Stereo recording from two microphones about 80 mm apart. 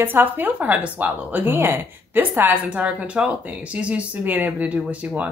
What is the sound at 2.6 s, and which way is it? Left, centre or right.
Speech, centre.